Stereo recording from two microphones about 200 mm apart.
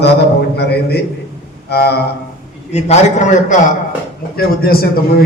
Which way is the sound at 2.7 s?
35° left (ahead or behind).